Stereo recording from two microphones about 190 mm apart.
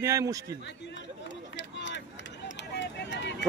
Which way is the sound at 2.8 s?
65° left (ahead or behind).